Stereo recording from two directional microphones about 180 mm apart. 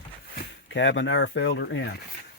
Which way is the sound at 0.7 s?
90° left.